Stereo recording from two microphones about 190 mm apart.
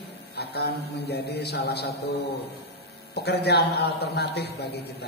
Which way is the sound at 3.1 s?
60° left (ahead or behind).